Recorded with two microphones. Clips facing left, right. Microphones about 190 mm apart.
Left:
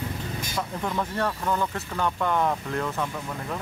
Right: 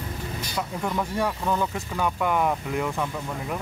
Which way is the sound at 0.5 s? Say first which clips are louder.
Right 1 dB; 5° right (ahead or behind).